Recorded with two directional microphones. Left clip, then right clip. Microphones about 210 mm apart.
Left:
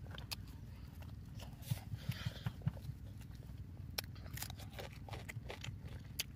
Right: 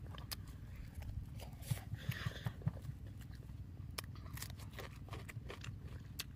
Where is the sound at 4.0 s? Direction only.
10° right (ahead or behind).